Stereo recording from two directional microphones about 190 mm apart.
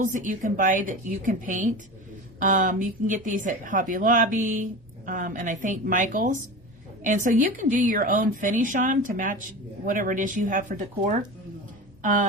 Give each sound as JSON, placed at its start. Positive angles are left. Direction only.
{"t": 0.0, "sound": "a woman's voice", "side_deg": -40}